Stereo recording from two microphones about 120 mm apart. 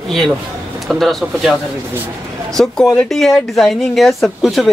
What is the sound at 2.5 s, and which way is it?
Speech, 5° left (ahead or behind).